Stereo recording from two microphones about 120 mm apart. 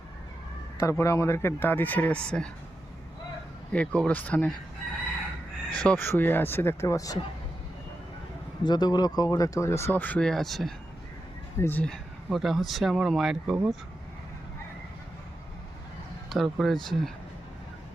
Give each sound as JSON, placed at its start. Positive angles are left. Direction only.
{"t": 0.8, "sound": "speech", "side_deg": 25}
{"t": 3.7, "sound": "speech", "side_deg": 10}
{"t": 5.7, "sound": "speech", "side_deg": 10}
{"t": 8.6, "sound": "speech", "side_deg": 35}
{"t": 11.5, "sound": "speech", "side_deg": 20}
{"t": 11.9, "sound": "speech", "side_deg": 0}
{"t": 16.3, "sound": "speech", "side_deg": 0}